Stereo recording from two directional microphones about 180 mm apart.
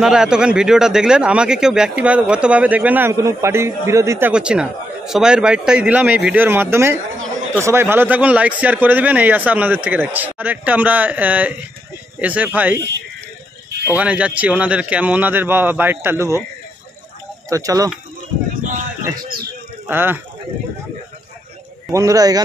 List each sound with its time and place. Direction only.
0.0 s speech: 5° right (ahead or behind)
4.3 s speech: 5° right (ahead or behind)
13.8 s speech: 5° right (ahead or behind)
17.5 s speech: 20° right (ahead or behind)
19.9 s speech: 10° right (ahead or behind)
21.9 s speech: 20° right (ahead or behind)